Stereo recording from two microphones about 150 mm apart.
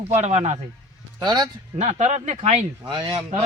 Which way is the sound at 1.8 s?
50° right (ahead or behind).